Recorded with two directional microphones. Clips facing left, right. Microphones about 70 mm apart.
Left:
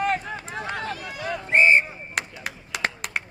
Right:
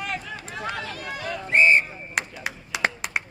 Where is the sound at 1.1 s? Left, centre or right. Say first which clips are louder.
Left 1 dB; centre.